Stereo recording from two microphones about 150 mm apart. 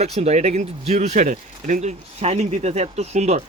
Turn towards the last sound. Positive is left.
turn(degrees=-50)  # may be behind; listen again after turning